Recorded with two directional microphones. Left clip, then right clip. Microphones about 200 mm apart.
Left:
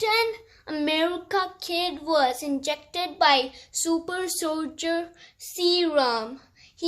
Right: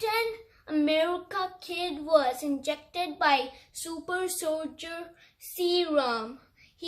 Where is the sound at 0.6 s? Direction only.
50° left (ahead or behind).